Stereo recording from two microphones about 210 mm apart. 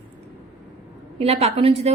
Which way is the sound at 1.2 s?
30° right (ahead or behind).